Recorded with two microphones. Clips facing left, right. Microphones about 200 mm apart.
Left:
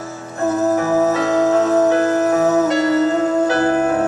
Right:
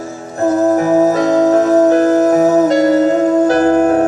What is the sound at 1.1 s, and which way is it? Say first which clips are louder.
Music: right 4 dB; 40° right (ahead or behind).